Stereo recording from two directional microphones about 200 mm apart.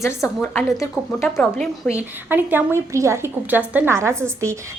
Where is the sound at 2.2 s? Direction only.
10° right (ahead or behind).